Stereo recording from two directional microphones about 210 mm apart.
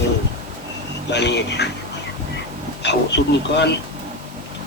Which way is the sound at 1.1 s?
55° left (ahead or behind).